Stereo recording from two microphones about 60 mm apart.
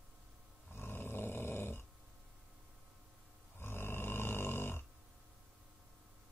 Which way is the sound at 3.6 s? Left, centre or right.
Left.